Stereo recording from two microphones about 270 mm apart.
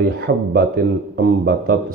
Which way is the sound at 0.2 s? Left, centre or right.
Right.